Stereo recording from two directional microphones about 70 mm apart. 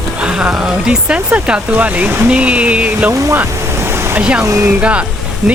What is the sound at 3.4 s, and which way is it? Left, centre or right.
Waves, right.